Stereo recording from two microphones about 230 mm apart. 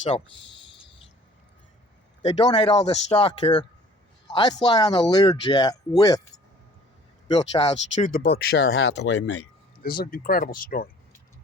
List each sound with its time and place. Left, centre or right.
2.2 s speech: centre
7.3 s speech: centre; by 9.4 s left
9.8 s speech: left